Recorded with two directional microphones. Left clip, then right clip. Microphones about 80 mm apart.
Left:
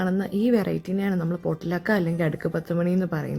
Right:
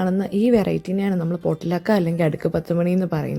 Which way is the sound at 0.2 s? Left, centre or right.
Right.